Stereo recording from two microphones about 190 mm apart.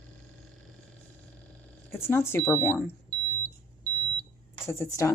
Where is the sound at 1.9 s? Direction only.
10° left (ahead or behind).